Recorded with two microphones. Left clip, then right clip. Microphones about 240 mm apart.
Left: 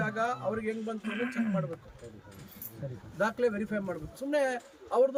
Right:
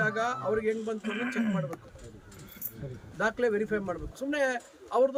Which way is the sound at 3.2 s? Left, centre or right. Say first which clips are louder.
Right 2 dB; centre.